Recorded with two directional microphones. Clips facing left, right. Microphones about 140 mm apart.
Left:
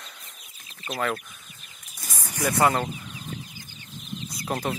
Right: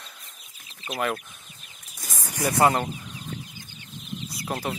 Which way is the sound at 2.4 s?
25° right (ahead or behind).